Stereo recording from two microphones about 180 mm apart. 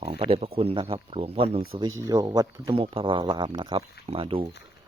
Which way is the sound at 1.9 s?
20° right (ahead or behind).